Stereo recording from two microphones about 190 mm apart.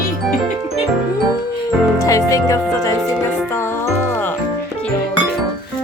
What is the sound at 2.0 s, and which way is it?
Music, 15° left (ahead or behind).